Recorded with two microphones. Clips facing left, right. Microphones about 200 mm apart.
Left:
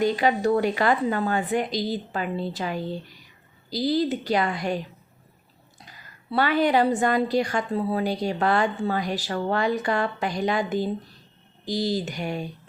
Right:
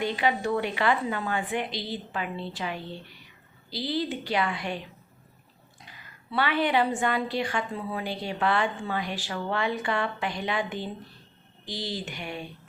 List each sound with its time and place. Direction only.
0.0 s a woman's voice: 40° left (ahead or behind)
5.8 s a woman's voice: 40° left (ahead or behind)